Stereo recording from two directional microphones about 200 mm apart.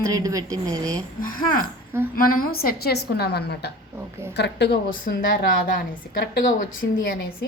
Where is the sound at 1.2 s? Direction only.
45° left (ahead or behind).